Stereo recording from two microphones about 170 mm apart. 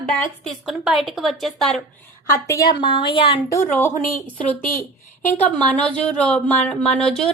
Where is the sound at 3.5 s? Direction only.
15° left (ahead or behind).